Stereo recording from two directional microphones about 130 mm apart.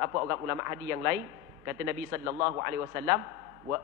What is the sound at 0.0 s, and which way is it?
A man's voice, 25° right (ahead or behind).